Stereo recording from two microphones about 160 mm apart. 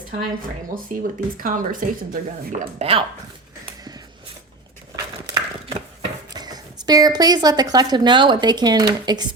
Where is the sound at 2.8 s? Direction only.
35° right (ahead or behind).